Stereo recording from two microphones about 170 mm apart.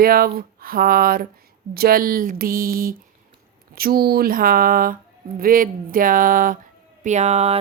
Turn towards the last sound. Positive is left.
turn(degrees=-40)  # may be behind; listen again after turning